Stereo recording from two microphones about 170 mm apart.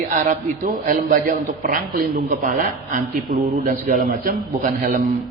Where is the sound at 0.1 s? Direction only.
50° right (ahead or behind).